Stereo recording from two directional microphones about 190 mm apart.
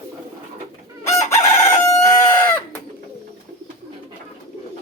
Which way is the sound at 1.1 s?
15° left (ahead or behind).